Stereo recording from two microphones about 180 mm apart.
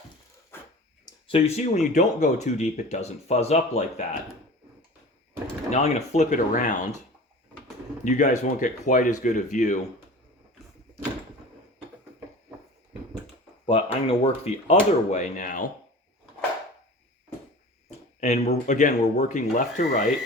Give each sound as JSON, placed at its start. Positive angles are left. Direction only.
{"t": 1.3, "sound": "speech", "side_deg": 35}
{"t": 5.7, "sound": "speech", "side_deg": 40}
{"t": 8.0, "sound": "speech", "side_deg": 45}
{"t": 13.7, "sound": "speech", "side_deg": 30}
{"t": 18.2, "sound": "speech", "side_deg": 40}